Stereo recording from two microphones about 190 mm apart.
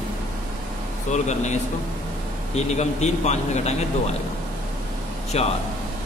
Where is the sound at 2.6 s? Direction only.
35° left (ahead or behind).